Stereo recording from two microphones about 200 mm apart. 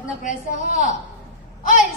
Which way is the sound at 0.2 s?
40° left (ahead or behind).